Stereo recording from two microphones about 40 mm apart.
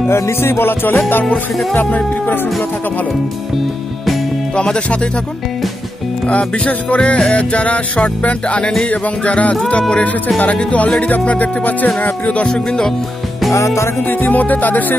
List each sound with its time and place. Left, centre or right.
0.1 s music: left
4.6 s music: left
6.2 s music: left
11.0 s speech: left
12.0 s music: left
12.5 s music: left
14.0 s speech: left